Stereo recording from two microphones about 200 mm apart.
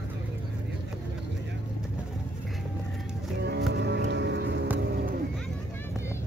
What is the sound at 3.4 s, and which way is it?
Music, 60° right (ahead or behind).